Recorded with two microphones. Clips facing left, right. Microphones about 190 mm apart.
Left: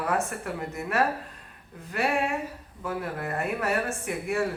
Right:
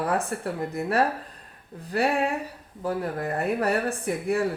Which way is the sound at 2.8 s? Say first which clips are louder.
Right 4 dB; 35° right (ahead or behind).